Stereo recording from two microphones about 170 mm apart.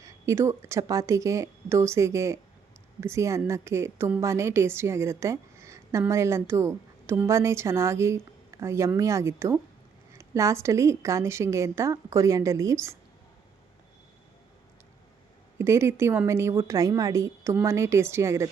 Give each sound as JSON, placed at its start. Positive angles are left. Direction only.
{"t": 0.0, "sound": "a woman's voice", "side_deg": -15}
{"t": 15.5, "sound": "a woman's voice", "side_deg": -15}